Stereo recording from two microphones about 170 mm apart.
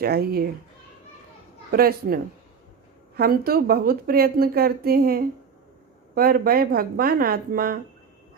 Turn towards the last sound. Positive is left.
turn(degrees=-60)  # may be behind; listen again after turning